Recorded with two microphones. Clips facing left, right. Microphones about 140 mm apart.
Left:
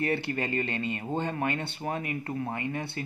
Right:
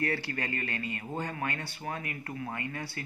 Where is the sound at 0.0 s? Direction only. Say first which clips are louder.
Left 4 dB; 20° left (ahead or behind).